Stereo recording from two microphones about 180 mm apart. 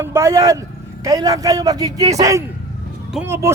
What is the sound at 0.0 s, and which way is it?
A man's voice, 15° right (ahead or behind).